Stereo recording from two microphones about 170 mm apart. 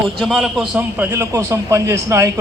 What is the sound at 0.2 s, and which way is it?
Speech, centre (ahead or behind).